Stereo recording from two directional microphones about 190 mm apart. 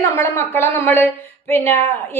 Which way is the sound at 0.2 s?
10° left (ahead or behind).